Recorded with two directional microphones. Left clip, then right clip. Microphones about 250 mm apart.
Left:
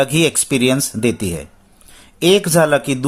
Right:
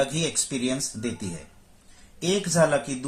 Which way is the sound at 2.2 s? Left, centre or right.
Left.